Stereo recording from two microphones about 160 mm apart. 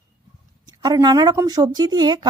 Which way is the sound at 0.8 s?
25° right (ahead or behind).